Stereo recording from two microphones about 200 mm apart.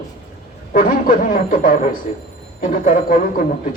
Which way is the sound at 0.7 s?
45° left (ahead or behind).